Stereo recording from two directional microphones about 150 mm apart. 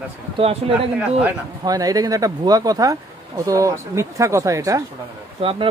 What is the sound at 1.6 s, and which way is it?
Speech, 25° right (ahead or behind).